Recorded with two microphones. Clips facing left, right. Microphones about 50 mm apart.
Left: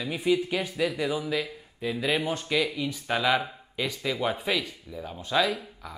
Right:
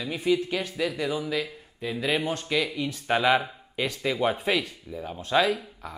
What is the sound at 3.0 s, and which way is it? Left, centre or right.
Speech, centre.